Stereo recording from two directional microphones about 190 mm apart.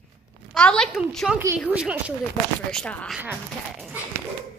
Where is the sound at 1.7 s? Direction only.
5° right (ahead or behind).